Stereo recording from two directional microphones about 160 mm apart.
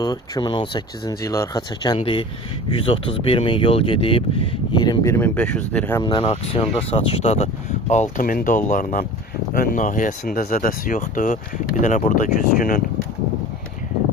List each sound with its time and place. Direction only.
0.0 s speech: 25° left (ahead or behind); by 6.0 s 10° left (ahead or behind)
6.0 s speech: 30° left (ahead or behind); by 12.8 s 60° left (ahead or behind)